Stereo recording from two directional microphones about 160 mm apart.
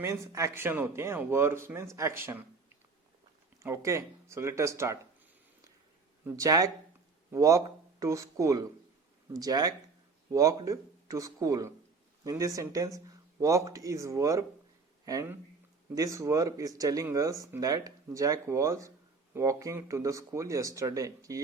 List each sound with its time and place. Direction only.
0.0 s speech: 20° right (ahead or behind)
3.6 s speech: 15° right (ahead or behind)
6.2 s speech: 20° right (ahead or behind)